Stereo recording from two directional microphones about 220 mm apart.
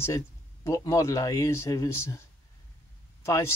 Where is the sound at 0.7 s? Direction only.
15° left (ahead or behind).